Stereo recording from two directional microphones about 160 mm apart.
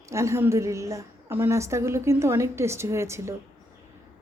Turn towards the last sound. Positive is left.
turn(degrees=-15)  # may be behind; listen again after turning